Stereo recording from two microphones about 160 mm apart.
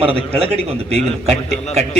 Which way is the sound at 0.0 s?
35° right (ahead or behind).